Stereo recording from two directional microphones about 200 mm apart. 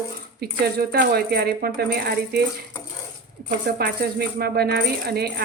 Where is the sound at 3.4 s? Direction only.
50° right (ahead or behind).